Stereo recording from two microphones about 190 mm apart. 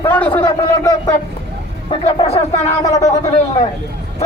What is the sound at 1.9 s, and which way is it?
Speech, 35° left (ahead or behind).